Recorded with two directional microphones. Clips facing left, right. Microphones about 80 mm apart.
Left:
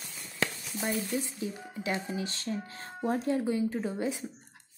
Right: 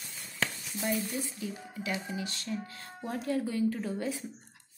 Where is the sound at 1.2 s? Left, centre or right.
Left.